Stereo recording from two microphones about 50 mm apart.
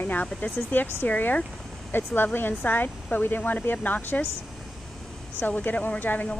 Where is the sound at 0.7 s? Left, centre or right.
Left.